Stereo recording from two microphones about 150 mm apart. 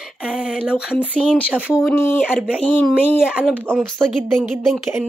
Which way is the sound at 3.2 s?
5° right (ahead or behind).